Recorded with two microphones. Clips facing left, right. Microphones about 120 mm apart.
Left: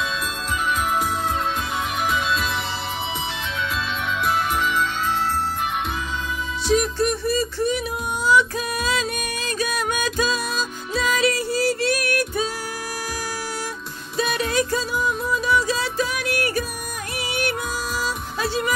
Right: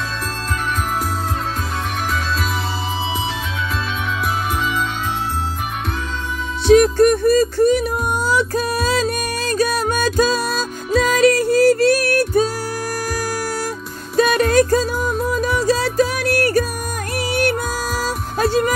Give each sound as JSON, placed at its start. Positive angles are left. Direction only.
{"t": 6.7, "sound": "music", "side_deg": -55}
{"t": 14.1, "sound": "music", "side_deg": -50}